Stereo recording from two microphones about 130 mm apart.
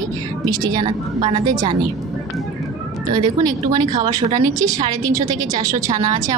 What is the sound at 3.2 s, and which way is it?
A woman's voice, 30° right (ahead or behind).